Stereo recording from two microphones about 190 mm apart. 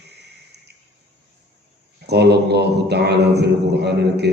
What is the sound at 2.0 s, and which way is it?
A man's voice, 60° right (ahead or behind).